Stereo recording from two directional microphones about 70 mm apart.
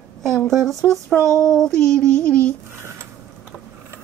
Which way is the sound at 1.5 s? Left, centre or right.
Centre.